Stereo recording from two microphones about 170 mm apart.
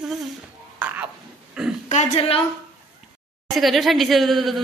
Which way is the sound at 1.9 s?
35° left (ahead or behind).